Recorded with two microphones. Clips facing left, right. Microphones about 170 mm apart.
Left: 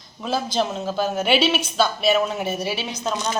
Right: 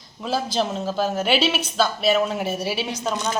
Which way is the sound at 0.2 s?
5° right (ahead or behind).